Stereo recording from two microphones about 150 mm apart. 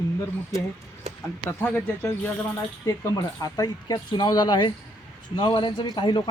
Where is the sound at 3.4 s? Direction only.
25° left (ahead or behind).